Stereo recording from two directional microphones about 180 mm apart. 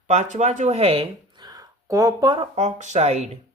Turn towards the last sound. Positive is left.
turn(degrees=-40)  # may be behind; listen again after turning